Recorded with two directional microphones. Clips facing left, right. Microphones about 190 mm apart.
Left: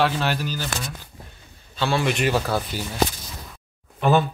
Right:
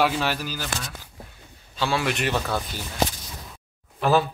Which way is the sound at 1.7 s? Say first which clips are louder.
Left 2 dB; 10° right (ahead or behind).